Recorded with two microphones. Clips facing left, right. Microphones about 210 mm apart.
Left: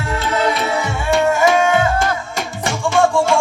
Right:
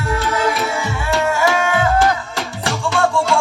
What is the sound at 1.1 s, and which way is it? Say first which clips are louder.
Music: left 3 dB; 20° left (ahead or behind).